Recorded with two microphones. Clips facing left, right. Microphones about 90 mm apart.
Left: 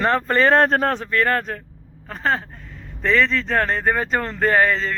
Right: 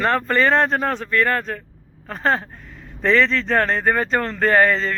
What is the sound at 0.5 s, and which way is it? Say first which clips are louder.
Speech: left 2 dB; 40° left (ahead or behind).